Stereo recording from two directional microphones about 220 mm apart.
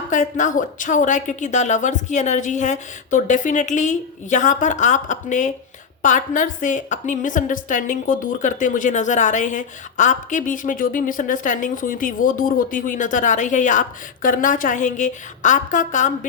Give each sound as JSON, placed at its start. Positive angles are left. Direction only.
{"t": 0.1, "sound": "a woman's voice", "side_deg": 35}